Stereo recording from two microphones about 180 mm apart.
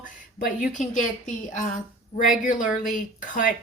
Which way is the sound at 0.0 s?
50° left (ahead or behind).